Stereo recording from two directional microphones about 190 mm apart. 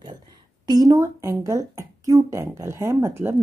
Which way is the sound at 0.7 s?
20° right (ahead or behind).